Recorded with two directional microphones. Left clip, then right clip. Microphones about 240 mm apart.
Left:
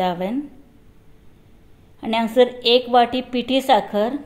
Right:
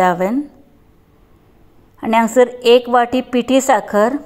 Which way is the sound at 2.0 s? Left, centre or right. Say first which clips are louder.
Right 5 dB; centre.